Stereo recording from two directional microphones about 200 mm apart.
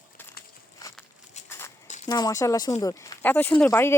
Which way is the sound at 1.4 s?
35° left (ahead or behind).